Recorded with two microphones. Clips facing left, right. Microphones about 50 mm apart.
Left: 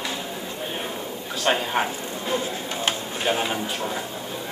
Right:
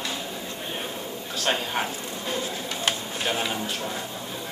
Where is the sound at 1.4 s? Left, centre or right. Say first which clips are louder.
Left 4 dB; centre.